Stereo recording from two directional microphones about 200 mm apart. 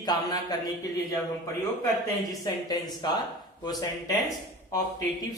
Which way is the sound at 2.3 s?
20° left (ahead or behind).